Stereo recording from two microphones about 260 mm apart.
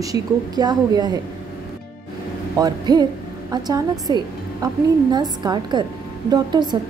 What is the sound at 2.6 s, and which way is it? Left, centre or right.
A woman's voice, centre.